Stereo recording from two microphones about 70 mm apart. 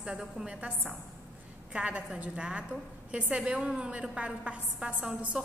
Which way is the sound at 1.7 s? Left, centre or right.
Centre.